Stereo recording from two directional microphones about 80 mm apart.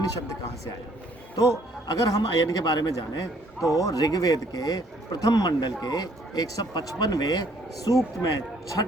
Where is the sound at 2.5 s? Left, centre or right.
Left.